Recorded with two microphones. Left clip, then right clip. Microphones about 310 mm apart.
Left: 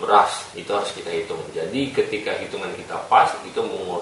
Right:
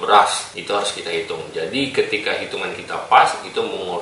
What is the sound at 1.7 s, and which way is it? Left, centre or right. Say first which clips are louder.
Speech: right 3 dB; centre.